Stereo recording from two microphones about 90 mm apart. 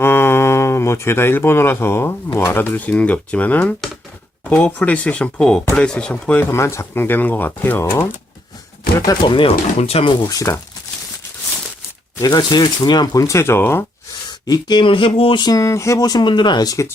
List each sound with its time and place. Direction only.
0.0 s speech: 25° left (ahead or behind)
6.5 s speech: 30° left (ahead or behind)
9.2 s speech: 70° left (ahead or behind)
10.2 s speech: 35° left (ahead or behind)
12.2 s speech: 55° left (ahead or behind)
13.2 s speech: 30° left (ahead or behind)
14.3 s speech: 50° left (ahead or behind); by 15.4 s 75° left (ahead or behind)
15.4 s speech: 40° left (ahead or behind)